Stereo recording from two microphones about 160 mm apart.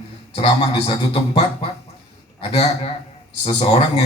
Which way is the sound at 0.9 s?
40° left (ahead or behind).